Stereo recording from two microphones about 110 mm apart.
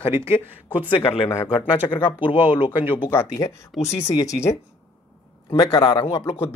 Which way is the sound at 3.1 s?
25° left (ahead or behind).